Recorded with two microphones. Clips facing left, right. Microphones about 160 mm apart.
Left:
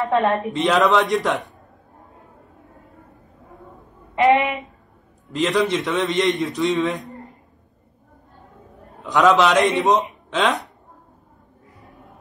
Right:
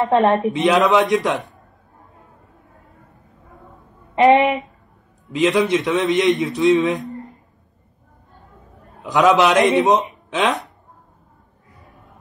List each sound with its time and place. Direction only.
0.1 s speech: 25° right (ahead or behind)
0.6 s a man's voice: 5° right (ahead or behind)
4.1 s speech: 30° right (ahead or behind)
5.3 s a man's voice: centre (ahead or behind)
9.0 s a man's voice: 5° right (ahead or behind)
9.8 s speech: 20° right (ahead or behind)
10.3 s a man's voice: centre (ahead or behind)